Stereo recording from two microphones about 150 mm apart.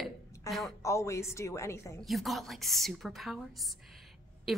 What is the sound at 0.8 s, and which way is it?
A woman's voice, 20° left (ahead or behind).